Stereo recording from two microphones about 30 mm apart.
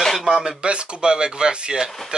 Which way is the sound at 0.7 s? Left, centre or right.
Right.